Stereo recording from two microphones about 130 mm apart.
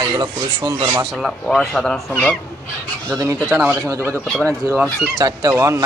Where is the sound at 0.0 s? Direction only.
35° right (ahead or behind).